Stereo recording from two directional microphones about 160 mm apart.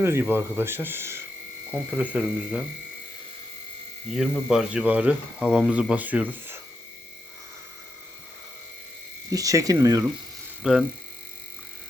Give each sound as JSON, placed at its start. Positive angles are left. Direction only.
{"t": 0.0, "sound": "speech", "side_deg": -15}
{"t": 4.1, "sound": "speech", "side_deg": -5}
{"t": 9.3, "sound": "speech", "side_deg": -20}
{"t": 10.6, "sound": "speech", "side_deg": -5}